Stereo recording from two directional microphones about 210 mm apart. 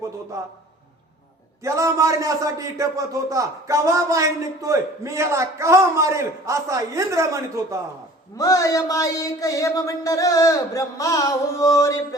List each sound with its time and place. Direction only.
0.3 s speech: 15° right (ahead or behind)
1.6 s speech: 15° right (ahead or behind)
8.4 s speech: 15° left (ahead or behind)